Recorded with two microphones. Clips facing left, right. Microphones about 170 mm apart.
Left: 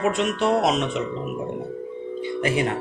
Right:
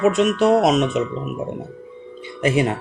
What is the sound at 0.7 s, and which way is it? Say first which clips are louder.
Speech: right 5 dB; 20° right (ahead or behind).